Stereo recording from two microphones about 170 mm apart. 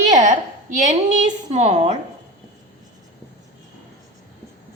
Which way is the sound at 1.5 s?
45° right (ahead or behind).